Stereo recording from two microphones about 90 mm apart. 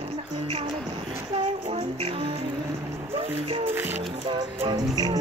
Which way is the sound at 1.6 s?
90° right.